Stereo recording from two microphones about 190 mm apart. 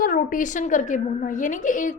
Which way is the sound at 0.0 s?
45° left (ahead or behind).